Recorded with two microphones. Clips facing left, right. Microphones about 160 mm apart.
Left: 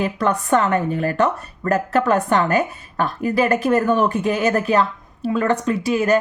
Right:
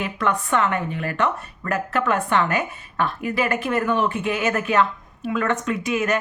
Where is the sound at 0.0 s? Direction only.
40° left (ahead or behind).